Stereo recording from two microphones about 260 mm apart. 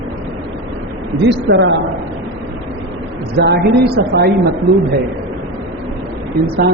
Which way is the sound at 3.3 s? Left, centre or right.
Right.